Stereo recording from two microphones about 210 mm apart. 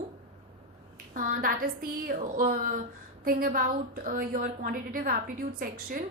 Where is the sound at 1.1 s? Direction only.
40° right (ahead or behind).